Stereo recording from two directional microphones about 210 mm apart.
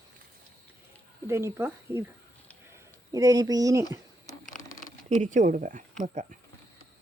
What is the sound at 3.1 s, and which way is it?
Speech, 15° right (ahead or behind).